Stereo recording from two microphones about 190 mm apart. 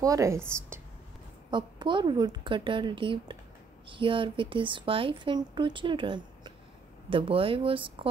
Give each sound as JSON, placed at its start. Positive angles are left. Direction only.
{"t": 0.0, "sound": "a woman's voice", "side_deg": -15}
{"t": 1.5, "sound": "speech", "side_deg": -25}